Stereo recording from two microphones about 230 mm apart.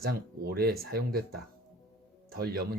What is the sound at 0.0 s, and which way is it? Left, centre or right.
Speech, right.